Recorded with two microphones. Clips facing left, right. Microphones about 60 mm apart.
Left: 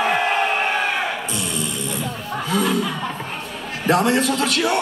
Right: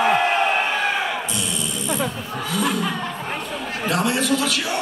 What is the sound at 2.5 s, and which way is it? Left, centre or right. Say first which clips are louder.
Chuckle: left 2 dB; left.